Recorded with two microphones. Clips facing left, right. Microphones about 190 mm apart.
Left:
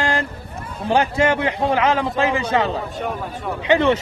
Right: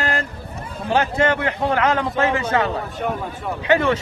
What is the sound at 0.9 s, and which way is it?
A man's voice, 15° left (ahead or behind).